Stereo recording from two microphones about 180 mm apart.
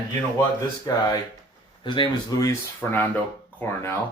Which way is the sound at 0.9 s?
20° left (ahead or behind).